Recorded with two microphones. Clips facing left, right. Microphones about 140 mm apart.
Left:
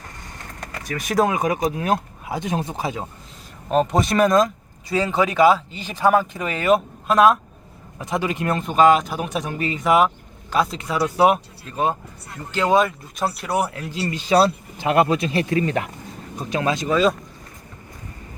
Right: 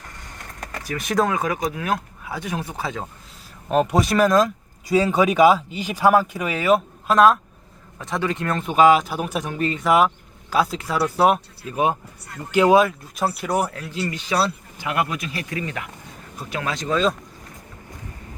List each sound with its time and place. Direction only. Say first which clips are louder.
0.6 s a sound: even; centre (ahead or behind)
1.2 s speech: left 3 dB; 15° left (ahead or behind)
3.7 s speech: even; 5° right (ahead or behind)
7.9 s speech: left 1 dB; 15° left (ahead or behind)
8.5 s speech: even; 5° right (ahead or behind)
12.5 s speech: right 3 dB; 10° right (ahead or behind); by 13.8 s 5° left (ahead or behind)
14.0 s speech: left 5 dB; 25° left (ahead or behind)
16.4 s speech: left 5 dB; 20° left (ahead or behind)
16.9 s speech: left 2 dB; 5° left (ahead or behind)